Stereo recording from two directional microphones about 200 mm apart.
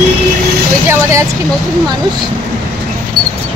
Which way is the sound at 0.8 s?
15° right (ahead or behind).